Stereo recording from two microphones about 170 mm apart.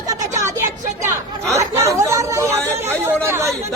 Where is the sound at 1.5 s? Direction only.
15° right (ahead or behind).